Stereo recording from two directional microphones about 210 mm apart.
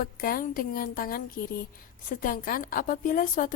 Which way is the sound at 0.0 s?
45° left (ahead or behind).